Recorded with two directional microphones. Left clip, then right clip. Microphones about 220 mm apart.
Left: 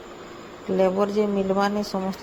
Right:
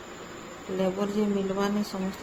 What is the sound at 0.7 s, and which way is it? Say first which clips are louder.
Speech: left 7 dB; 30° left (ahead or behind).